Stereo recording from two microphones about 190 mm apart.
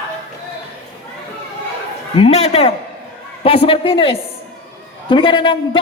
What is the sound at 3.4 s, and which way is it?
A man's voice, 30° left (ahead or behind).